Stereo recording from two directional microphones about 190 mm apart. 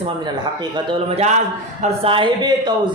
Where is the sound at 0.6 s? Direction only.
30° right (ahead or behind).